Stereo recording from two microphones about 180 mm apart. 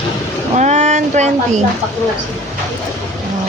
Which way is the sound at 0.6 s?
40° right (ahead or behind).